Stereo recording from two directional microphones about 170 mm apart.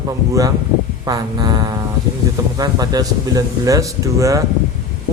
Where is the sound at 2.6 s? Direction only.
20° right (ahead or behind).